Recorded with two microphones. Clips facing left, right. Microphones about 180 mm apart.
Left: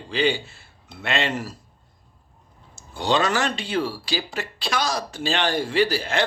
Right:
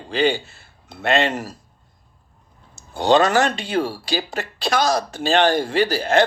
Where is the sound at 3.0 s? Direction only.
45° right (ahead or behind).